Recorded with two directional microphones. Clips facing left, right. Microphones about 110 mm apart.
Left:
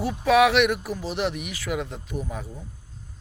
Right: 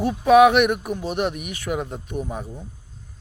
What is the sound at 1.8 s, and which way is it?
Speech, 15° right (ahead or behind).